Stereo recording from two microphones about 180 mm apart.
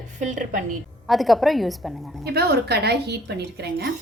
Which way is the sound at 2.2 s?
60° right (ahead or behind).